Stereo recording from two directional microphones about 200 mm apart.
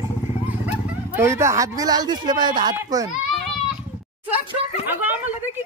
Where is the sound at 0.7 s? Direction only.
10° right (ahead or behind).